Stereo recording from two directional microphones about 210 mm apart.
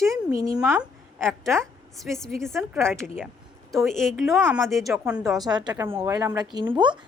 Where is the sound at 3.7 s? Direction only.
Centre (ahead or behind).